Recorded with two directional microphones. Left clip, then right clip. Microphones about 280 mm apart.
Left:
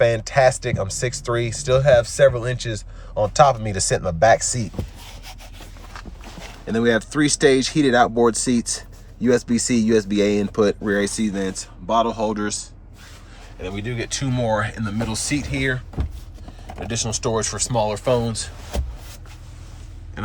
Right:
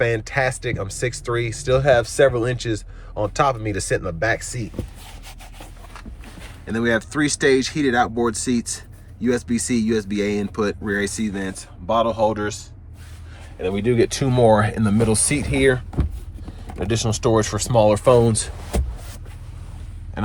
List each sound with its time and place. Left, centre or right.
0.0 s speech: centre
6.7 s speech: centre
16.8 s speech: right
20.2 s a sound: centre